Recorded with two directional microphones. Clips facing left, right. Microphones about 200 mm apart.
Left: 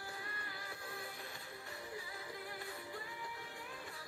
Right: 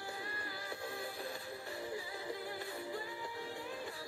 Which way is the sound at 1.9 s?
30° right (ahead or behind).